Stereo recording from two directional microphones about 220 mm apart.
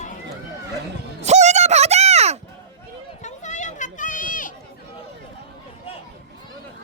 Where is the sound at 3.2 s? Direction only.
35° left (ahead or behind).